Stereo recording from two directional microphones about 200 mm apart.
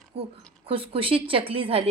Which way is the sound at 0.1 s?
30° right (ahead or behind).